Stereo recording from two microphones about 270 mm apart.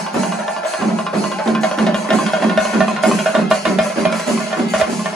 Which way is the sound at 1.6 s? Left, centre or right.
Centre.